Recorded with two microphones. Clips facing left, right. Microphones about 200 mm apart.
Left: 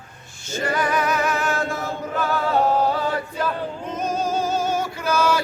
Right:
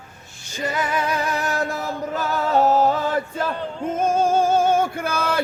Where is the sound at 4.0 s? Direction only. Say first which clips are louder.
Right 5 dB; 50° right (ahead or behind).